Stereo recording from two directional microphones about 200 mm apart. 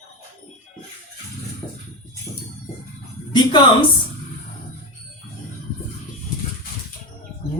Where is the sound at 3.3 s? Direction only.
25° left (ahead or behind).